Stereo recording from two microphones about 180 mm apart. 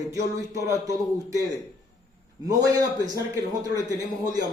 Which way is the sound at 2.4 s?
20° right (ahead or behind).